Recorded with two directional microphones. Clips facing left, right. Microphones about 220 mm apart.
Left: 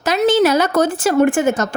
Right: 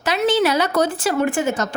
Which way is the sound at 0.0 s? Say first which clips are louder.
Left 4 dB; 45° left (ahead or behind).